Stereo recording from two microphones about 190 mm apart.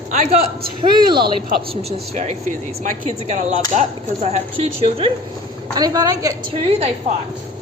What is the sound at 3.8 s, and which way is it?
Speech, 35° right (ahead or behind).